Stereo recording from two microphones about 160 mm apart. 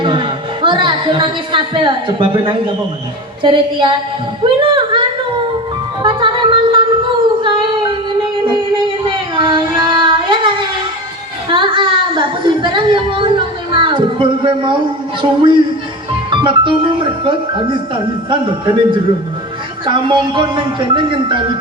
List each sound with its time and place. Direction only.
0.0 s a woman's voice: 30° right (ahead or behind)
4.6 s a sound: 30° right (ahead or behind)
8.4 s child singing: 30° right (ahead or behind)
11.5 s speech: 30° right (ahead or behind)